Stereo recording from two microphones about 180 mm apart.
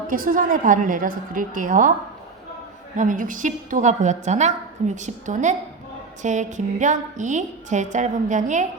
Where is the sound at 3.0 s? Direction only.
45° right (ahead or behind).